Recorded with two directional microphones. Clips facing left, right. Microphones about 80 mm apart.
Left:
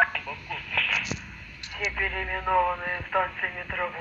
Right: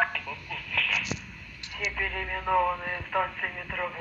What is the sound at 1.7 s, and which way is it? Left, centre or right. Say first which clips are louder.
Speech: left 2 dB; left.